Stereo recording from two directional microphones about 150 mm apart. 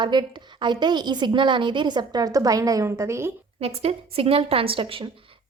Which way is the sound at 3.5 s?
40° right (ahead or behind).